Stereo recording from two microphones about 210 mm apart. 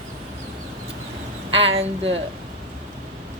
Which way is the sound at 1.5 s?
30° right (ahead or behind).